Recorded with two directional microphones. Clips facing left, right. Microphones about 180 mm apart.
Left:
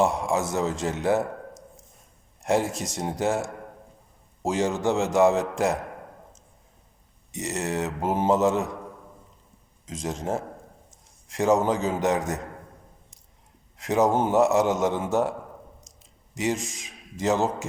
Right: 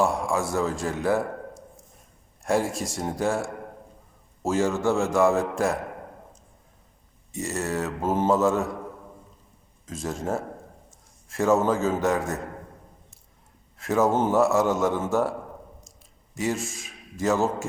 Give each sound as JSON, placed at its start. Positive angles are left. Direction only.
{"t": 0.0, "sound": "a man's voice", "side_deg": 20}
{"t": 7.3, "sound": "a man's voice", "side_deg": 20}
{"t": 9.8, "sound": "a man's voice", "side_deg": 20}
{"t": 13.7, "sound": "a man's voice", "side_deg": 20}